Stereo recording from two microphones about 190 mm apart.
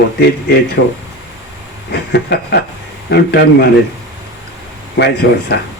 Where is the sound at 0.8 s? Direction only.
65° left (ahead or behind).